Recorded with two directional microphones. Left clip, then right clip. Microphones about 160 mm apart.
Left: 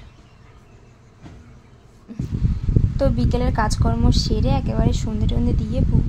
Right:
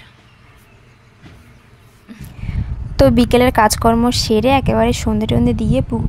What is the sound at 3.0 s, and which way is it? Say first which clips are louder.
A woman's voice: right 12 dB; 65° right (ahead or behind).